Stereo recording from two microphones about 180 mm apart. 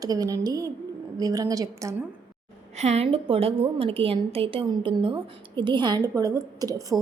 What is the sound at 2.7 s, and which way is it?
A woman's voice, 40° right (ahead or behind).